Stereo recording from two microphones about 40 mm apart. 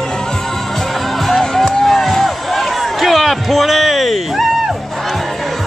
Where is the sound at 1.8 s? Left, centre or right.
Centre.